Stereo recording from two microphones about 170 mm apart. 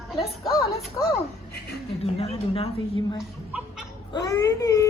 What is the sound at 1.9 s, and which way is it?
Speech, 35° left (ahead or behind).